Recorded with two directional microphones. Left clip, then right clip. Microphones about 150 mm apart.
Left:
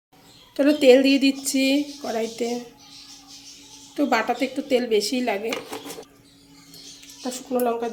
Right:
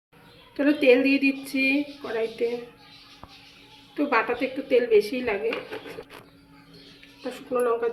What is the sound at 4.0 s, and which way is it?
Speech, 90° left.